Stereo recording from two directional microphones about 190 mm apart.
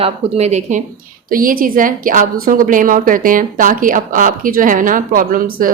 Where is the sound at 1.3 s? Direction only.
45° right (ahead or behind).